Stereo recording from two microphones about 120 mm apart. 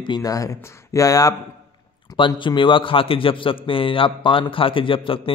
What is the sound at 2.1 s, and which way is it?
A man's voice, 45° left (ahead or behind).